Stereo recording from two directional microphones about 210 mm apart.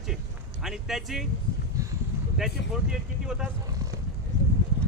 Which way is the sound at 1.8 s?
15° right (ahead or behind).